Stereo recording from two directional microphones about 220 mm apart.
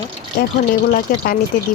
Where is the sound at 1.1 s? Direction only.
45° left (ahead or behind).